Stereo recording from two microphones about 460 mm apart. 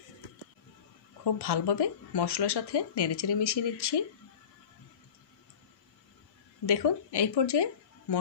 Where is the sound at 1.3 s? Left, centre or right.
Left.